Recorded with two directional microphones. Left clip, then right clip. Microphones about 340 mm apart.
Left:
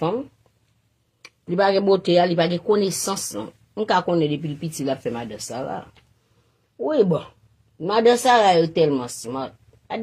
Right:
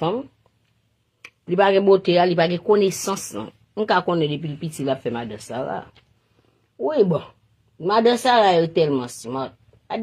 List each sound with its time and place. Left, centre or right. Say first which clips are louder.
1.2 s speech: right 2 dB; centre